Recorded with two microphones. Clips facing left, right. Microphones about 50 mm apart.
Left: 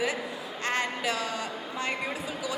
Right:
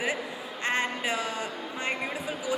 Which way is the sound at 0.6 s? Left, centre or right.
Right.